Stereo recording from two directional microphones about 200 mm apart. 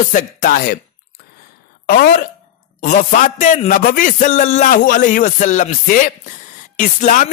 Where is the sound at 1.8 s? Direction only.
50° left (ahead or behind).